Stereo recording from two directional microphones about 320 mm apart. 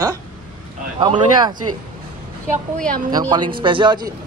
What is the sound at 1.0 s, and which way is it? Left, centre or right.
Speech, centre.